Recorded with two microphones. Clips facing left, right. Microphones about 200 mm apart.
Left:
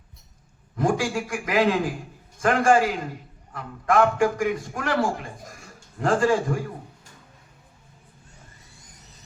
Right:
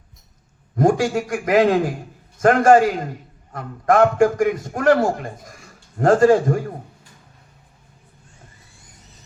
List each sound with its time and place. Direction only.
0.8 s a man's voice: 40° right (ahead or behind)